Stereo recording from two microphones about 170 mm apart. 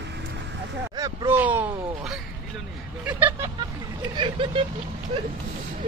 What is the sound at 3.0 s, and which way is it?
Vehicle, 10° right (ahead or behind).